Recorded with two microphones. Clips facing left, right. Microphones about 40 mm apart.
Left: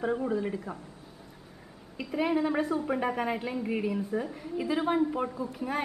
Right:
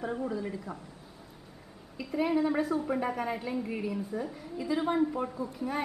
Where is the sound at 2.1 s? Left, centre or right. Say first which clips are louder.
Even; centre.